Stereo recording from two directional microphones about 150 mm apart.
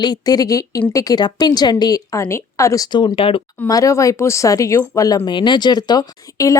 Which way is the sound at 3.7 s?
20° left (ahead or behind).